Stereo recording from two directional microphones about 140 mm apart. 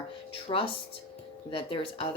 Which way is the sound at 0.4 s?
40° left (ahead or behind).